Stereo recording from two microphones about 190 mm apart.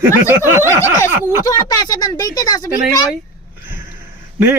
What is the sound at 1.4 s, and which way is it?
Speech, 20° left (ahead or behind).